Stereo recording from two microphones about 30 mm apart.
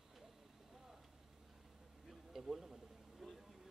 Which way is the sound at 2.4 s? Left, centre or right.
Centre.